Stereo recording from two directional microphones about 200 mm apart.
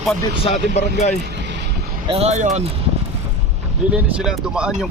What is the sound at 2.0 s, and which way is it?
Speech, 30° right (ahead or behind).